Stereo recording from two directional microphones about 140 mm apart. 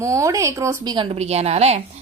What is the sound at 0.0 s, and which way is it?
Speech, 20° right (ahead or behind).